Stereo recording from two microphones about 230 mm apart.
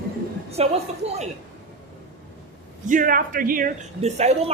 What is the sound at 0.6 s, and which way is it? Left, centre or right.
Speech, right.